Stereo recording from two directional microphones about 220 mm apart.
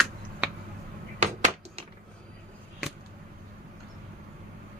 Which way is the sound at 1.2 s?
30° right (ahead or behind).